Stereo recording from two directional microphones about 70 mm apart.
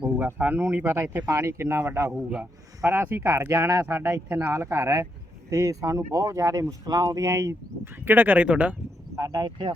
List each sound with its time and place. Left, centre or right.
0.2 s speech: right
3.9 s speech: right
4.5 s speech: right
7.9 s speech: right
9.1 s speech: right